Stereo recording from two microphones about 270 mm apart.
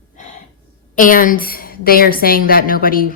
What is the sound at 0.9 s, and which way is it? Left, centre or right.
A woman's voice, left.